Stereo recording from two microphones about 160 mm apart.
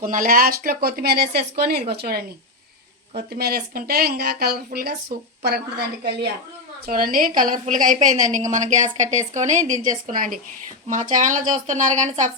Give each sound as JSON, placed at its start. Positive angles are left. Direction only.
{"t": 0.0, "sound": "a woman's voice", "side_deg": -60}
{"t": 6.8, "sound": "a woman's voice", "side_deg": -65}